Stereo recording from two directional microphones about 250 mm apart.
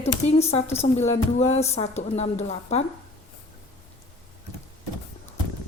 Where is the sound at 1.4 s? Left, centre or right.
Left.